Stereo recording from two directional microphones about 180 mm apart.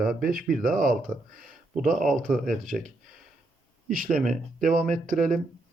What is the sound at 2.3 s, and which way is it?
Speech, 50° right (ahead or behind).